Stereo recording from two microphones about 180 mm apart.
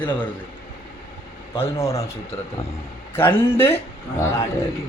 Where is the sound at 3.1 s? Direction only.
10° left (ahead or behind).